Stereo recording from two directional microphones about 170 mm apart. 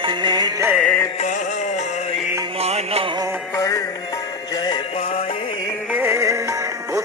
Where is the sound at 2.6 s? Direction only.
40° right (ahead or behind).